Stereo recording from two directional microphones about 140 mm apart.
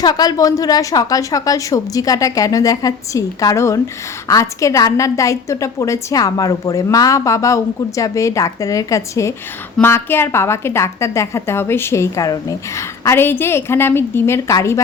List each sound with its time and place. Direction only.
0.0 s a woman's voice: 30° left (ahead or behind)